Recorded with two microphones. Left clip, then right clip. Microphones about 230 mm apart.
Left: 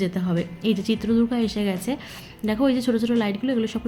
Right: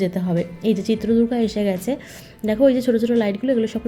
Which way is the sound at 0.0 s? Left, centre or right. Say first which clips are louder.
Right 4 dB; centre.